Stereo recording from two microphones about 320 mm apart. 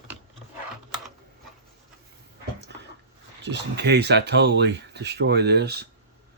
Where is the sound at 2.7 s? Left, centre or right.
Right.